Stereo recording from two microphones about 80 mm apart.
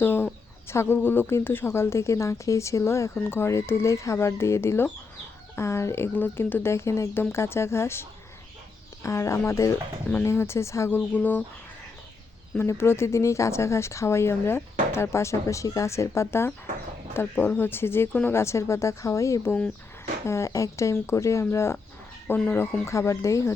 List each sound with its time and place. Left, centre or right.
0.0 s speech: left
9.0 s speech: left; by 11.4 s centre
12.6 s speech: left
18.3 s speech: left
22.9 s speech: left